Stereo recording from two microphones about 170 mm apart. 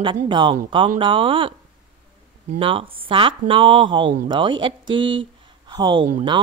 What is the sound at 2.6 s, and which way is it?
Speech, 30° right (ahead or behind).